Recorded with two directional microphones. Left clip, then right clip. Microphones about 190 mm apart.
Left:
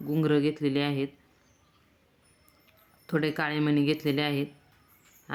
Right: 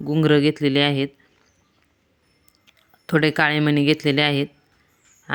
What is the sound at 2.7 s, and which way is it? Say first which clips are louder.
Speech: right 9 dB; 35° right (ahead or behind).